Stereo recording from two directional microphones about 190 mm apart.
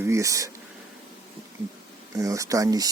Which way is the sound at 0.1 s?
15° right (ahead or behind).